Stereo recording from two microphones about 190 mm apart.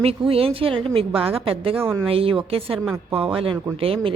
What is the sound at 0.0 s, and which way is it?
A woman's voice, 30° right (ahead or behind).